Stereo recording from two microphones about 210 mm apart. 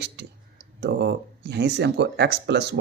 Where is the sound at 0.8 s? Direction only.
55° right (ahead or behind).